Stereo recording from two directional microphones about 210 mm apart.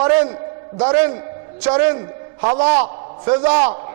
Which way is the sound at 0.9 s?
10° right (ahead or behind).